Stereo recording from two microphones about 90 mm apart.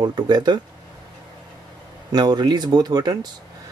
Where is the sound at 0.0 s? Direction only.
50° right (ahead or behind).